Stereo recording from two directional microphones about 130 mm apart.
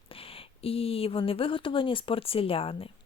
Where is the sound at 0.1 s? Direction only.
45° left (ahead or behind).